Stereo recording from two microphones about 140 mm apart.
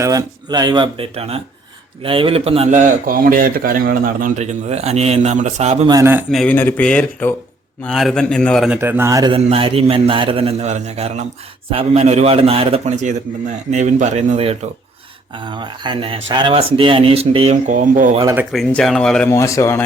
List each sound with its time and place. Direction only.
0.0 s speech: 25° right (ahead or behind); by 2.6 s 45° right (ahead or behind)
2.6 s a man's voice: 65° right (ahead or behind); by 4.3 s 90° right
4.4 s a man's voice: 55° right (ahead or behind)
5.9 s speech: 20° right (ahead or behind)
6.3 s a man's voice: 10° left (ahead or behind)
8.7 s a man's voice: 15° right (ahead or behind)
9.3 s a man's voice: 40° right (ahead or behind)
13.7 s speech: 55° right (ahead or behind)
15.4 s speech: 35° right (ahead or behind)
17.7 s speech: 65° right (ahead or behind)
18.5 s a man's voice: 5° left (ahead or behind)
19.3 s speech: 20° left (ahead or behind)